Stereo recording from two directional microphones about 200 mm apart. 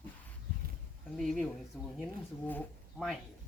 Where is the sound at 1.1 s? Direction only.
Centre (ahead or behind).